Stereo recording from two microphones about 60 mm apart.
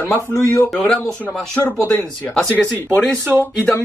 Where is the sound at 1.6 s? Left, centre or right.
Left.